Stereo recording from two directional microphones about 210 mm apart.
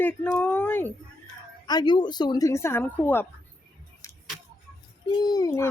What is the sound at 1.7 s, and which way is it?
Speech, 20° left (ahead or behind).